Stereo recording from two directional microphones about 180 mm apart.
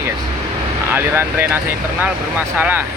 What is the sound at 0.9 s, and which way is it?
Speech, 10° right (ahead or behind).